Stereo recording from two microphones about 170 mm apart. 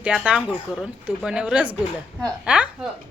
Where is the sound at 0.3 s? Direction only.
5° right (ahead or behind).